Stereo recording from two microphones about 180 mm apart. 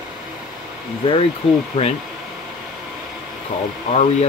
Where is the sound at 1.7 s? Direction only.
30° left (ahead or behind).